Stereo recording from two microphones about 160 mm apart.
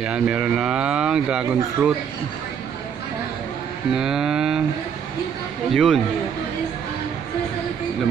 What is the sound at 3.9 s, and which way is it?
Speech, 5° right (ahead or behind).